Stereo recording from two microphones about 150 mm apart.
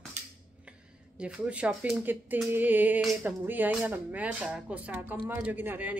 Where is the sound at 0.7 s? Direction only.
5° right (ahead or behind).